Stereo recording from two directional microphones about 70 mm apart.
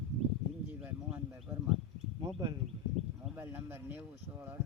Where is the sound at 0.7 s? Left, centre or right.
Right.